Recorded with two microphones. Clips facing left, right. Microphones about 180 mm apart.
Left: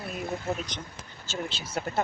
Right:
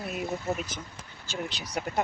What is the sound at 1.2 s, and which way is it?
Speech, 15° right (ahead or behind).